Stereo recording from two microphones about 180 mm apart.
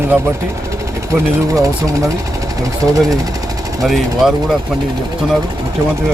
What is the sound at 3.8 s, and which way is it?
Speech, centre (ahead or behind).